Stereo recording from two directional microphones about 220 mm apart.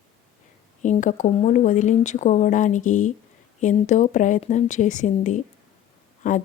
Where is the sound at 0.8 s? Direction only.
35° left (ahead or behind).